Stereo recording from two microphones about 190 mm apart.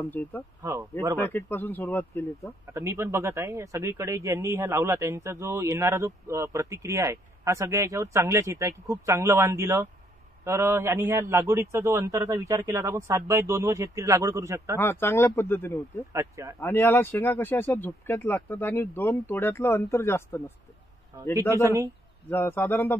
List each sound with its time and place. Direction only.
0.2 s speech: 10° left (ahead or behind)
0.6 s a man's voice: 15° right (ahead or behind)
1.1 s speech: 10° left (ahead or behind)
2.7 s a man's voice: 15° right (ahead or behind)
14.8 s speech: 10° left (ahead or behind)
16.1 s a man's voice: 15° right (ahead or behind)
16.5 s speech: 10° left (ahead or behind)
21.1 s a man's voice: 15° right (ahead or behind)
22.3 s speech: 10° left (ahead or behind)